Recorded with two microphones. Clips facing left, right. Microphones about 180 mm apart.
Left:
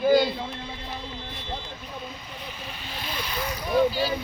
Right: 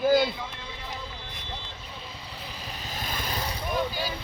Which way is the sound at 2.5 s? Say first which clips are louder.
Right 1 dB; 40° right (ahead or behind).